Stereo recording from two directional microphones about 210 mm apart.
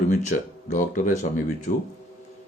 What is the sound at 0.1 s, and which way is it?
Speech, 35° left (ahead or behind).